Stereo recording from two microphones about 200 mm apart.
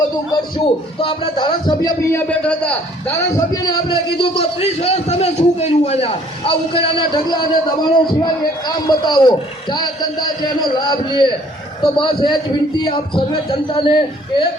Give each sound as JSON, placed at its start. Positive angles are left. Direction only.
{"t": 0.3, "sound": "a man's voice", "side_deg": 25}
{"t": 3.3, "sound": "a man's voice", "side_deg": 20}